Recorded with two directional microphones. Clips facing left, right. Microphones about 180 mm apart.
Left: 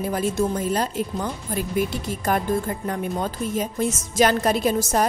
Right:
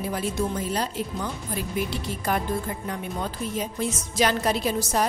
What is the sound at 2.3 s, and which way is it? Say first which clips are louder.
Speech: left 3 dB; 45° left (ahead or behind).